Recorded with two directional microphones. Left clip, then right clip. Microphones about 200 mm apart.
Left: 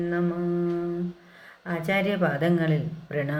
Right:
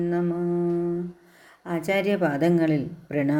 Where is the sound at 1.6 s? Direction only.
40° right (ahead or behind).